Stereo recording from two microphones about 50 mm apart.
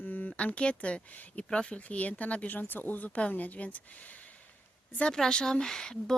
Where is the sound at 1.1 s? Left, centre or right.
Left.